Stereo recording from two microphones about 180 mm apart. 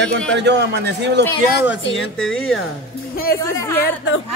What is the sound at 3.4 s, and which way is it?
Speech, 15° left (ahead or behind).